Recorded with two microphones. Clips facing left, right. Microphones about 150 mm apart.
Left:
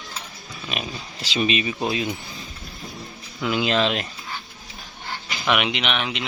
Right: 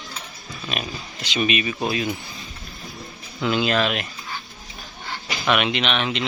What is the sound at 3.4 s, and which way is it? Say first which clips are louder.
Speech: right 1 dB; 10° left (ahead or behind).